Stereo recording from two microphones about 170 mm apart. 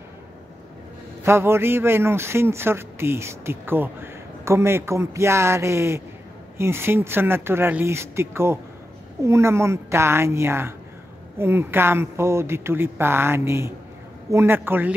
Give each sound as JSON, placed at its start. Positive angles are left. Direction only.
{"t": 1.2, "sound": "a man's voice", "side_deg": -15}